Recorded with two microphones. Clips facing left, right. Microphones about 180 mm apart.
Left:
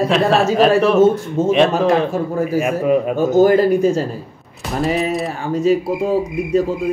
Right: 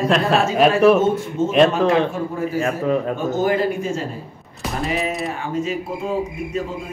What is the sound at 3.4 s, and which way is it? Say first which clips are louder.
Speech: left 8 dB; 40° left (ahead or behind).